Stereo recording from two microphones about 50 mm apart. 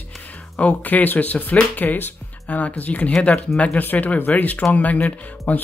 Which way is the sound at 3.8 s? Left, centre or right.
Left.